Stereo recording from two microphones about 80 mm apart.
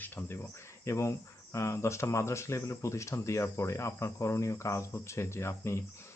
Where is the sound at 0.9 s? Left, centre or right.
Left.